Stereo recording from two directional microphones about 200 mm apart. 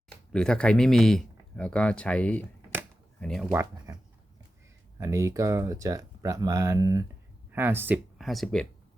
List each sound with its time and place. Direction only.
0.3 s speech: 5° left (ahead or behind)
3.5 s speech: 10° right (ahead or behind)
4.9 s speech: 15° right (ahead or behind); by 8.6 s centre (ahead or behind)